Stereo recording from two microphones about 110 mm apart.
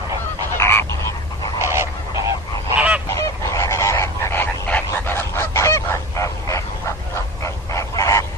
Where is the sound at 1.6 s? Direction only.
25° right (ahead or behind).